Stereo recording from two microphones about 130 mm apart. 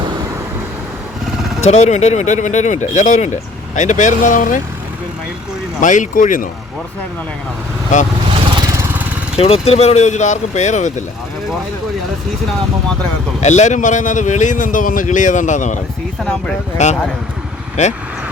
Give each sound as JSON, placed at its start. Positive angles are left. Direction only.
{"t": 1.6, "sound": "speech", "side_deg": 60}
{"t": 5.8, "sound": "speech", "side_deg": 75}
{"t": 8.4, "sound": "vehicle", "side_deg": -30}
{"t": 9.4, "sound": "speech", "side_deg": 50}
{"t": 13.4, "sound": "speech", "side_deg": 65}
{"t": 16.2, "sound": "speech", "side_deg": 5}
{"t": 16.7, "sound": "speech", "side_deg": 60}